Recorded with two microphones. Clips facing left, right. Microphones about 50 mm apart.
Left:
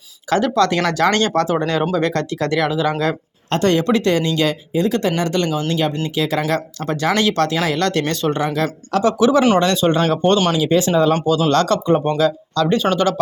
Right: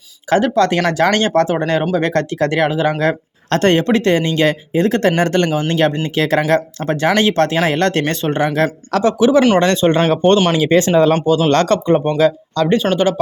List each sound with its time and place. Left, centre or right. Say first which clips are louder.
0.3 s speech: right 2 dB; right
6.5 s speech: right 5 dB; right
9.1 s speech: right 3 dB; right
9.6 s speech: right 3 dB; right